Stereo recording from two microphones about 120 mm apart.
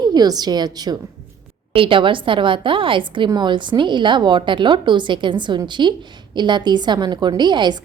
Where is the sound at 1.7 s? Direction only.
45° right (ahead or behind).